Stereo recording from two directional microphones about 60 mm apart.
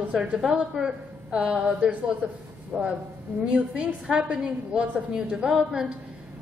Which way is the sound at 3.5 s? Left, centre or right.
Centre.